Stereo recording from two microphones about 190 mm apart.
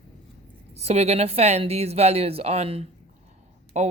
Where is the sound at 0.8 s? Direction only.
35° right (ahead or behind).